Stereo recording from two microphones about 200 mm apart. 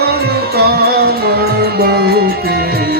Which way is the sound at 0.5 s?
50° right (ahead or behind).